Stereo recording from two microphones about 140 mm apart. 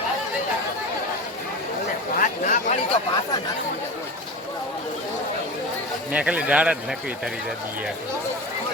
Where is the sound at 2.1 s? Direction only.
70° left (ahead or behind).